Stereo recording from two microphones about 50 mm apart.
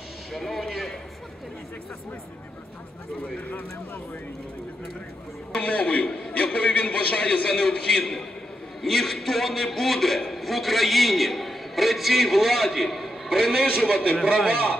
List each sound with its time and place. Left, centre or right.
0.3 s a man's voice: centre
5.6 s a man's voice: left
8.8 s a man's voice: centre
13.9 s a man's voice: left